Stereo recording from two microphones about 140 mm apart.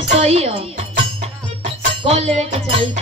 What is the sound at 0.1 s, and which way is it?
Music, 50° right (ahead or behind).